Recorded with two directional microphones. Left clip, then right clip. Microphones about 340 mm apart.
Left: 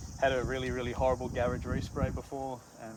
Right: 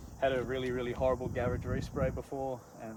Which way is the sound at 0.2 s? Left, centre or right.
Centre.